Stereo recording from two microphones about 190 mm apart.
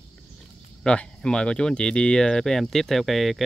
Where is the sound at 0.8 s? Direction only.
5° left (ahead or behind).